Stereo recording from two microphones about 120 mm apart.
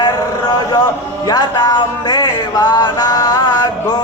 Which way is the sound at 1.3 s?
35° left (ahead or behind).